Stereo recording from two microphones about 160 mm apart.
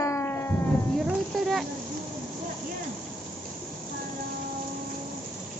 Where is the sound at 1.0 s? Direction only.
Centre (ahead or behind).